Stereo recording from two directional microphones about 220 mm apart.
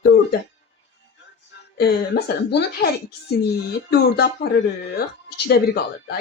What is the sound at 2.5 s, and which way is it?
Speech, 50° left (ahead or behind).